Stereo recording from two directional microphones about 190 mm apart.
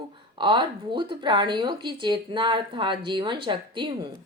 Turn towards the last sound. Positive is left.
turn(degrees=-25)  # may be behind; listen again after turning